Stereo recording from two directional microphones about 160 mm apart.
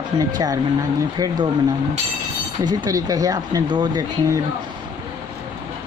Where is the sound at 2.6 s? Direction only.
25° right (ahead or behind).